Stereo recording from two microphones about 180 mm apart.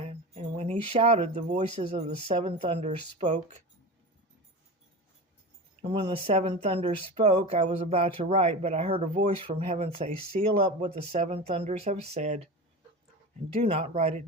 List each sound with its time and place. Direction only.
0.0 s speech: 35° right (ahead or behind)
2.8 s speech: 45° right (ahead or behind)
5.8 s speech: 30° right (ahead or behind)
13.6 s speech: 35° right (ahead or behind)